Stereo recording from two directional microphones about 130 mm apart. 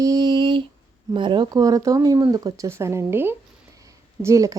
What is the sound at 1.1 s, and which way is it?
Speech, 40° right (ahead or behind).